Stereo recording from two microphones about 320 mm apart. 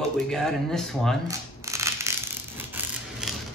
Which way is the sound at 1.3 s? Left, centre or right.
Centre.